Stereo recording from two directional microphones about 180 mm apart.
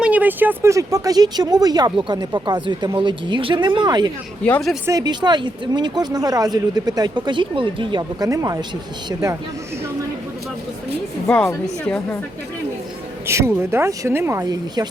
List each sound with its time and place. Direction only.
0.0 s speech: 10° right (ahead or behind)
4.4 s a woman's voice: 10° left (ahead or behind)
4.9 s speech: 20° right (ahead or behind)
11.6 s a woman's voice: 5° left (ahead or behind)
13.2 s speech: 15° right (ahead or behind)